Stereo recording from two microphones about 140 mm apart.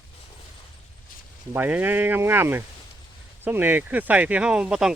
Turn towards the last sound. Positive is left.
turn(degrees=-5)  # may be behind; listen again after turning